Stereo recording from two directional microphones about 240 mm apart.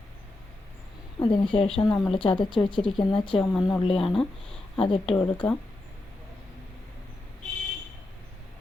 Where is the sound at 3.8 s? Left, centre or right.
Left.